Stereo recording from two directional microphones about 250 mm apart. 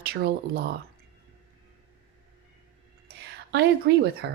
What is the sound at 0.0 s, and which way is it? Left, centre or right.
Speech, right.